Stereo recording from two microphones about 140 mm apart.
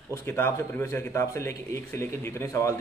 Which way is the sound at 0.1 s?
20° left (ahead or behind).